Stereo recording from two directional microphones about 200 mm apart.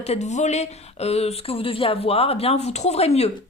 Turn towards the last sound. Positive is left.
turn(degrees=30)  # may be behind; listen again after turning